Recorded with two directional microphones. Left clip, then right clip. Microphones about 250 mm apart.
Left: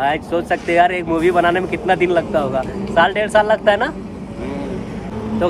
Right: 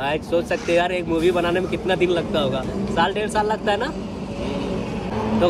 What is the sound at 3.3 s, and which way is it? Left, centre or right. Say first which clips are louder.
Speech: left 7 dB; left.